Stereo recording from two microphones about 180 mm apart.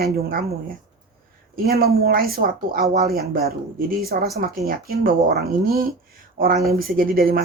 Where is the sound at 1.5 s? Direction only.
55° right (ahead or behind).